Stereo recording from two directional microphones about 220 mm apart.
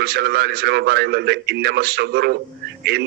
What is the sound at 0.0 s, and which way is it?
A man's voice, 45° right (ahead or behind).